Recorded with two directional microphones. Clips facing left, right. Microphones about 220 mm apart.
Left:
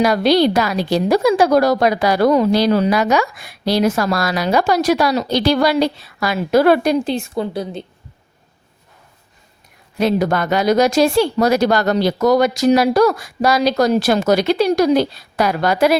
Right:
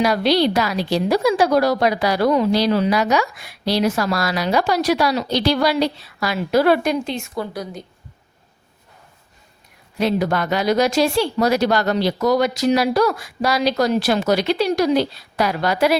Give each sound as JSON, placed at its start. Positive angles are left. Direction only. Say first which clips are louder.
{"t": 0.0, "sound": "a woman's voice", "louder": "left 3 dB", "side_deg": 45}
{"t": 6.8, "sound": "a woman's voice", "louder": "left 5 dB", "side_deg": 35}
{"t": 10.0, "sound": "a woman's voice", "louder": "left 3 dB", "side_deg": 45}